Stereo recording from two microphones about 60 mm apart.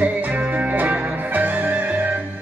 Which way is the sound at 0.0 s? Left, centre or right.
Right.